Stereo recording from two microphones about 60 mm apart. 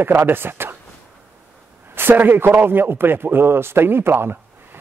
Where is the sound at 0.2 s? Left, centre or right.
Right.